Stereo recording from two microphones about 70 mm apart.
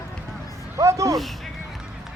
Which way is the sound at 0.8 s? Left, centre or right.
Right.